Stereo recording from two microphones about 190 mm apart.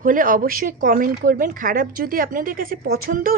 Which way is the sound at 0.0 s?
45° right (ahead or behind).